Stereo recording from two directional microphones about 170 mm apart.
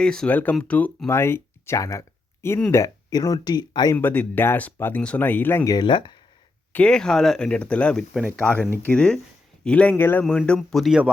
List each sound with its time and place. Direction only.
0.0 s speech: 5° left (ahead or behind)
2.8 s speech: 20° left (ahead or behind)
3.9 s speech: 10° left (ahead or behind); by 6.1 s 25° left (ahead or behind)
6.7 s speech: 5° left (ahead or behind)